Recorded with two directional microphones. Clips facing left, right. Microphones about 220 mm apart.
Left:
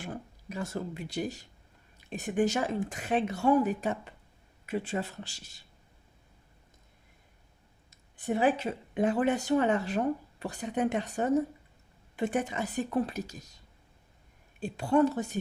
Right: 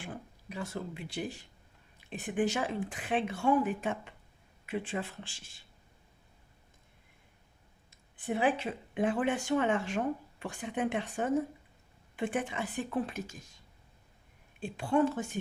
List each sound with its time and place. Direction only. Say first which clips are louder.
0.0 s speech: left 4 dB; 45° left (ahead or behind)
7.9 s speech: left 3 dB; 40° left (ahead or behind)
14.6 s speech: left 3 dB; 40° left (ahead or behind)